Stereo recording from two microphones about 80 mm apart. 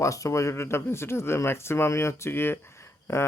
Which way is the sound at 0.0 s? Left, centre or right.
Left.